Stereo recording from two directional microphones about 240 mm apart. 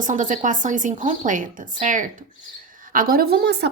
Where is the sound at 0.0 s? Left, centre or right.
Right.